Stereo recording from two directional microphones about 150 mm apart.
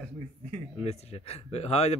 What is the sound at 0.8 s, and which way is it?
A man's voice, 45° left (ahead or behind).